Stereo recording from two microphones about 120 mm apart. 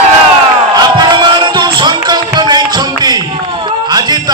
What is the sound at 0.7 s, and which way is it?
Crowd, 35° right (ahead or behind).